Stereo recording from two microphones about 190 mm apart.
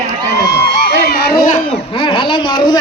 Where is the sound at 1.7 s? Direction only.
25° left (ahead or behind).